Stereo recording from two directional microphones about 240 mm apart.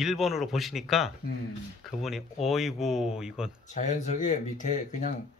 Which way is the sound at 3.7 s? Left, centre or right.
Left.